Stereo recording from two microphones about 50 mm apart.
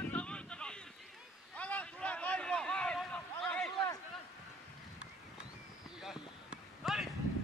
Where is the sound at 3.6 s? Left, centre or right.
Centre.